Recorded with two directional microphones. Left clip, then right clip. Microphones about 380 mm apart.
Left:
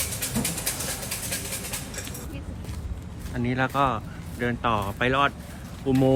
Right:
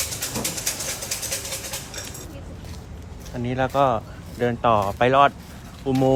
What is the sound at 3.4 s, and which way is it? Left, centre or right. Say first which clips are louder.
Speech: right 4 dB; centre.